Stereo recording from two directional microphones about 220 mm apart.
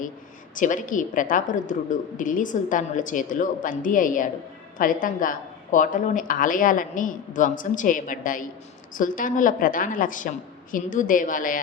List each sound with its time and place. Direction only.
0.5 s a woman's voice: 35° left (ahead or behind)